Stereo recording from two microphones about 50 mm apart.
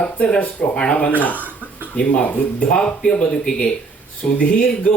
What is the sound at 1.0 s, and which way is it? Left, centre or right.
Speech, left.